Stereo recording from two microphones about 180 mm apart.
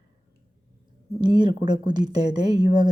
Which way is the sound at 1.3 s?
25° right (ahead or behind).